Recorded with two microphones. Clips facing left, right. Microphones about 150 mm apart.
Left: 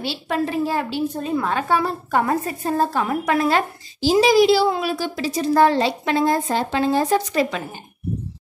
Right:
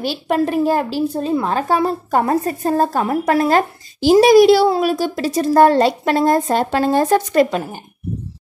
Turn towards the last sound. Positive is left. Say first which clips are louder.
# right 5 dB
turn(degrees=-55)  # may be behind; listen again after turning